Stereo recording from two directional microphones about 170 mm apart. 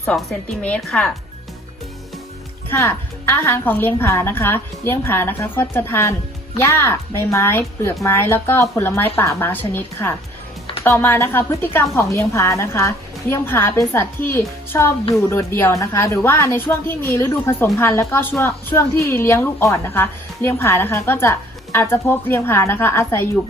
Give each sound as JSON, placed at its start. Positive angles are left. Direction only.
{"t": 0.2, "sound": "a woman's voice", "side_deg": 5}
{"t": 2.6, "sound": "a woman's voice", "side_deg": 15}